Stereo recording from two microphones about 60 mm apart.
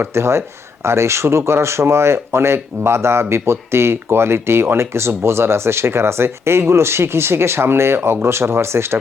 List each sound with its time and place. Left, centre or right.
0.0 s speech: right